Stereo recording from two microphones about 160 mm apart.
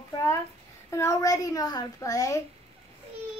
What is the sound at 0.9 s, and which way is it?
A child's voice, 20° left (ahead or behind).